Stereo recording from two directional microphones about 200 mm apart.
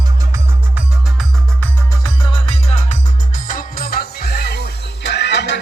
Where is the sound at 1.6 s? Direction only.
15° left (ahead or behind).